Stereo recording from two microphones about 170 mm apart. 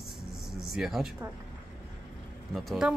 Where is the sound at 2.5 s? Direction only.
Centre (ahead or behind).